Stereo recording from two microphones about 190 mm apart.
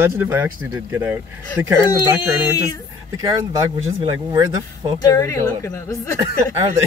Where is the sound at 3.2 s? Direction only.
15° right (ahead or behind).